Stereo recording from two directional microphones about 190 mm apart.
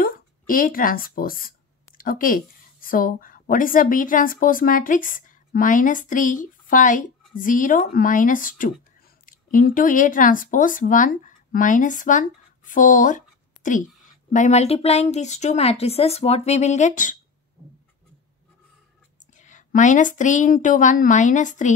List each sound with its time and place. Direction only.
0.0 s a woman's voice: 45° left (ahead or behind)
19.3 s speech: 40° left (ahead or behind)